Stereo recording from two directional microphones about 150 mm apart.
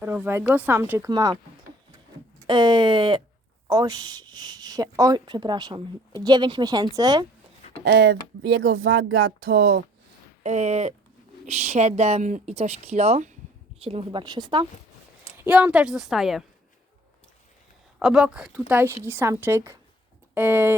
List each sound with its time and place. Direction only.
0.0 s speech: 10° right (ahead or behind)
2.5 s a woman's voice: 30° right (ahead or behind)
7.9 s speech: 90° right
10.4 s speech: 50° right (ahead or behind)
13.8 s a woman's voice: 35° right (ahead or behind)
15.4 s a woman's voice: 10° right (ahead or behind)
18.0 s a woman's voice: 5° right (ahead or behind)